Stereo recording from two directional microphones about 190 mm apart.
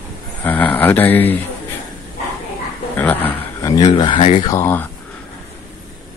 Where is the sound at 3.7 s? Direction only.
25° left (ahead or behind).